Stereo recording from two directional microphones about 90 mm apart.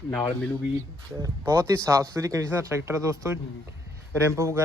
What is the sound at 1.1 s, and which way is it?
Speech, 30° right (ahead or behind).